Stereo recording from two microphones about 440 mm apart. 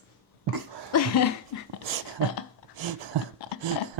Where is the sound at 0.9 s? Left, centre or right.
Left.